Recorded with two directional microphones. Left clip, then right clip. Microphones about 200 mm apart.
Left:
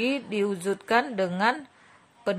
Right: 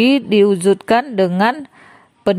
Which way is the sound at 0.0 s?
45° right (ahead or behind).